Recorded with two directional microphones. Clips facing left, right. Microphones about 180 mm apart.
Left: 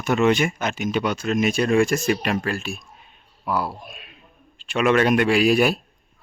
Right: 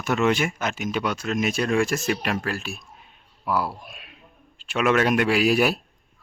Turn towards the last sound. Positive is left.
turn(degrees=-5)  # may be behind; listen again after turning